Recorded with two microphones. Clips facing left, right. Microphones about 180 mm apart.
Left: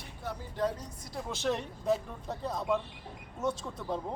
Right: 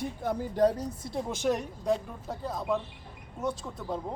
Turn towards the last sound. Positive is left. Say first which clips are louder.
# right 1 dB
turn(degrees=0)  # may be behind; listen again after turning